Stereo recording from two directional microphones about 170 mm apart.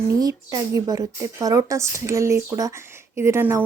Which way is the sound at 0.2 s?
20° right (ahead or behind).